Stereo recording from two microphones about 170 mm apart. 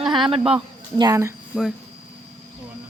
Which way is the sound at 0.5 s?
25° right (ahead or behind).